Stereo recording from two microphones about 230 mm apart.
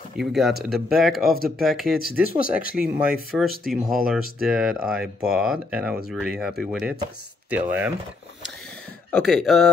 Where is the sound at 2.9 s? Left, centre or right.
Centre.